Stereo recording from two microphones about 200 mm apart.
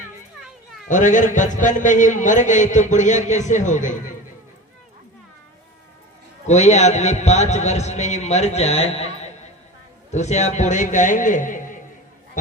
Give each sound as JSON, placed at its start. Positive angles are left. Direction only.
{"t": 0.9, "sound": "a man's voice", "side_deg": 40}
{"t": 6.5, "sound": "a man's voice", "side_deg": 35}